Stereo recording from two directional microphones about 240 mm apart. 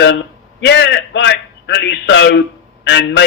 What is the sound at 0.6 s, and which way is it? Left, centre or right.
A man's voice, left.